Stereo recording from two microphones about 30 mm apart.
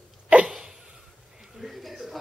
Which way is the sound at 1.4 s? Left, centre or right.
Centre.